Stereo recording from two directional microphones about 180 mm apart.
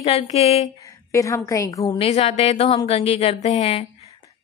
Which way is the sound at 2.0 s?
35° left (ahead or behind).